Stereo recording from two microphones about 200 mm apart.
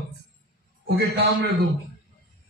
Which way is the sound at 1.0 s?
50° right (ahead or behind).